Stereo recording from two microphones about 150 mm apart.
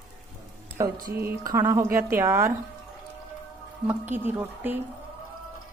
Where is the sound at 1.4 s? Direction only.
20° right (ahead or behind).